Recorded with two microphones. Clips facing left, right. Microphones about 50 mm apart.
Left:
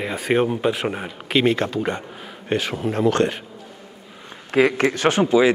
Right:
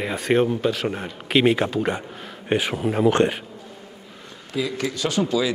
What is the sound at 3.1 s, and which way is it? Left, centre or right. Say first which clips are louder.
Speech: right 1 dB; centre.